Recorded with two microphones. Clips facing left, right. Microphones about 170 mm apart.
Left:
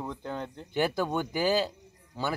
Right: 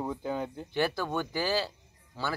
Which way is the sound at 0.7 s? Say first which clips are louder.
Left 2 dB; 15° left (ahead or behind).